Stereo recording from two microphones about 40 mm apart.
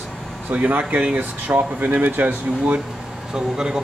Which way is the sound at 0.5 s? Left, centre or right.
Right.